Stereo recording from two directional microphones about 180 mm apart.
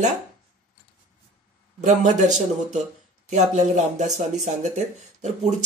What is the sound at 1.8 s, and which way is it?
Speech, 40° right (ahead or behind).